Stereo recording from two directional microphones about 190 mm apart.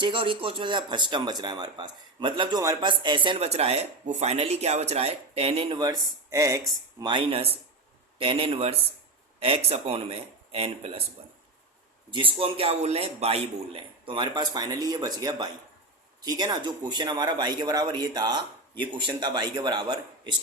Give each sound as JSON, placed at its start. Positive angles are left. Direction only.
{"t": 0.0, "sound": "speech", "side_deg": -25}
{"t": 12.1, "sound": "speech", "side_deg": -30}